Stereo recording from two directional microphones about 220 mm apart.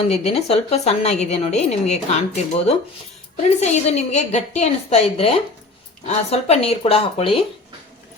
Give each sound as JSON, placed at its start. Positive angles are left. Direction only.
{"t": 0.0, "sound": "a woman's voice", "side_deg": 25}